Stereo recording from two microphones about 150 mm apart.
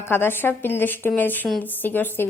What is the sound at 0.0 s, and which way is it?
Speech, 15° left (ahead or behind).